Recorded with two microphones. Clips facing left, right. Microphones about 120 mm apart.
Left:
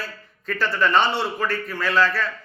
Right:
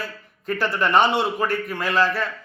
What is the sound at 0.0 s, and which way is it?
A man's voice, 20° right (ahead or behind).